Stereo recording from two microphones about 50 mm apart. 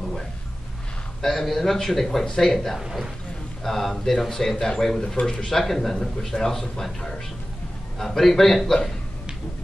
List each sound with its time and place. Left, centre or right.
1.2 s speech: centre
2.2 s a man's voice: centre
2.5 s speech: centre
2.8 s a man's voice: centre
3.6 s a man's voice: centre